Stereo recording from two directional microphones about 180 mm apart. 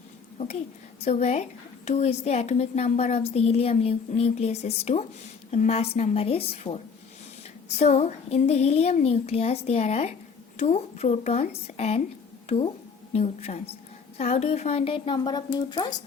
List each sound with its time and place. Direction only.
1.0 s a woman's voice: 40° left (ahead or behind)